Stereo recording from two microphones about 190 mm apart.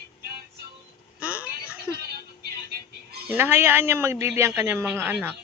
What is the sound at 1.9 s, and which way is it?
Music, 55° right (ahead or behind).